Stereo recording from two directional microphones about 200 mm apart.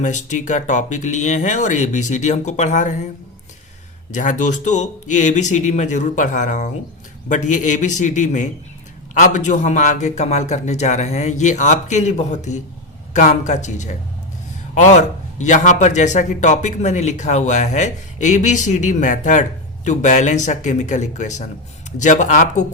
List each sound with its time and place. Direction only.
0.0 s a man's voice: 35° left (ahead or behind)
4.1 s a man's voice: 40° left (ahead or behind)